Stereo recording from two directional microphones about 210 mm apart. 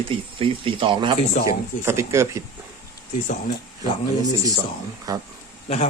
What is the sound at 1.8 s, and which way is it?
Speech, 15° right (ahead or behind).